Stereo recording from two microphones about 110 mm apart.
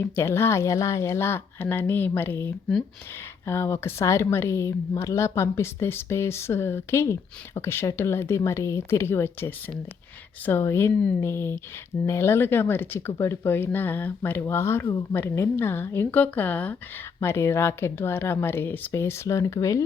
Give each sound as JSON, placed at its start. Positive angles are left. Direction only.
{"t": 0.0, "sound": "a woman's voice", "side_deg": 25}